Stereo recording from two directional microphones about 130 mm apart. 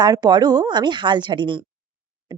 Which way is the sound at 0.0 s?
30° right (ahead or behind).